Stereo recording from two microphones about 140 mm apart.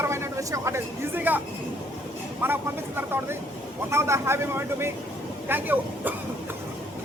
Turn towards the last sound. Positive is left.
turn(degrees=-15)  # may be behind; listen again after turning